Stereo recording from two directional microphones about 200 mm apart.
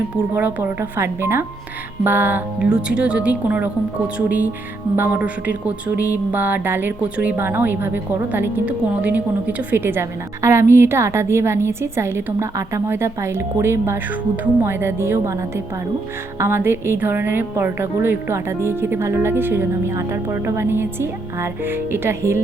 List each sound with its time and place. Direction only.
0.3 s speech: 10° right (ahead or behind)